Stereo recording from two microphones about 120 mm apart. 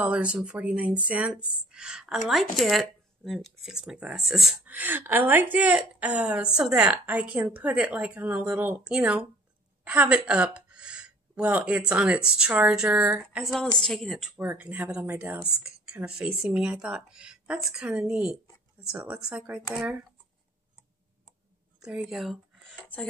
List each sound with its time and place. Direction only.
0.0 s a woman's voice: 10° right (ahead or behind)
4.6 s a woman's voice: 15° right (ahead or behind)
13.4 s a woman's voice: 5° left (ahead or behind)
14.4 s a woman's voice: 15° right (ahead or behind)
15.9 s a woman's voice: 5° right (ahead or behind)
21.8 s speech: 5° right (ahead or behind)